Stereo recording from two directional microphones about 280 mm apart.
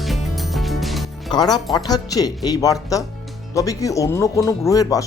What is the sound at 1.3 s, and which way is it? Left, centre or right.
Speech, centre.